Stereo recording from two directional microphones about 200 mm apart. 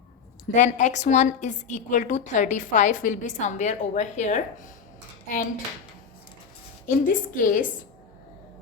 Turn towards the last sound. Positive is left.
turn(degrees=40)  # may be behind; listen again after turning